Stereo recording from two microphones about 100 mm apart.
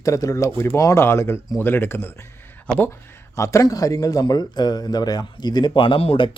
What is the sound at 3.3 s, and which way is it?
A man's voice, 30° left (ahead or behind).